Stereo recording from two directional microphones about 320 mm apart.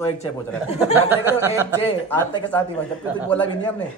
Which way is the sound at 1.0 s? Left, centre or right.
Centre.